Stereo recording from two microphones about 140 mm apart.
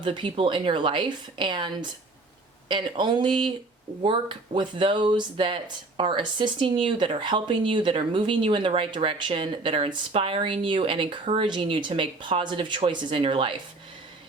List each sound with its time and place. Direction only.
0.0 s speech: 35° right (ahead or behind)